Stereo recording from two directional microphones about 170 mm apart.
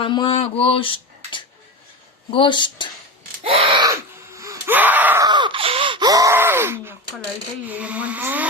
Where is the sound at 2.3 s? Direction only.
30° left (ahead or behind).